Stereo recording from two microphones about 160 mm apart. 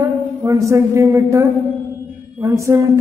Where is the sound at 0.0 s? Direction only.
20° right (ahead or behind).